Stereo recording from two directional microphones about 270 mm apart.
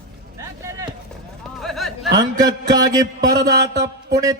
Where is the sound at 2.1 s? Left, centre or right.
Centre.